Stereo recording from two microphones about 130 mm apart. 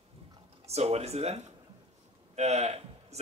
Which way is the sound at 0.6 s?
55° right (ahead or behind).